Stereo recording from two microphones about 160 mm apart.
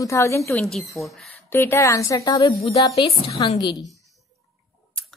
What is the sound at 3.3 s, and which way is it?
Speech, 40° left (ahead or behind).